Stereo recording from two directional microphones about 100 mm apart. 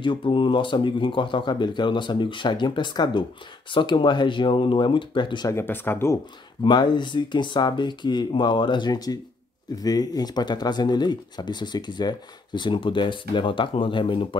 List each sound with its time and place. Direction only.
0.0 s speech: 55° left (ahead or behind)
5.5 s speech: 25° left (ahead or behind)
6.6 s speech: 50° left (ahead or behind)